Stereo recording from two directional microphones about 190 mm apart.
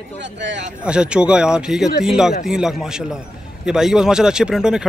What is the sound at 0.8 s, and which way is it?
Speech, 5° right (ahead or behind).